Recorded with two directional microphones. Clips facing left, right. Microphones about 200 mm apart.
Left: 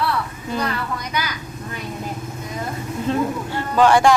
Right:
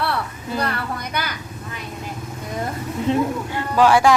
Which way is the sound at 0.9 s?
55° right (ahead or behind).